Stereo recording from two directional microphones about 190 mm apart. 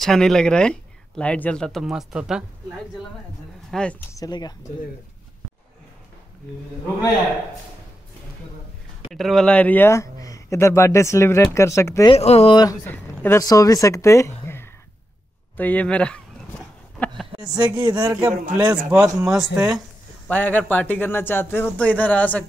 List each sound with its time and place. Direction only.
0.0 s speech: centre (ahead or behind)
3.7 s speech: centre (ahead or behind)
4.1 s speech: 20° left (ahead or behind)
9.1 s speech: centre (ahead or behind)
12.1 s speech: 30° left (ahead or behind); by 14.7 s 10° left (ahead or behind)
15.5 s a sound: 10° left (ahead or behind)
17.6 s speech: 20° right (ahead or behind)
20.2 s speech: 10° left (ahead or behind)